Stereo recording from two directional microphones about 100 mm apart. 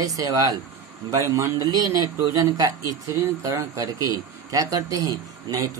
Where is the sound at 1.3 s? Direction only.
35° right (ahead or behind).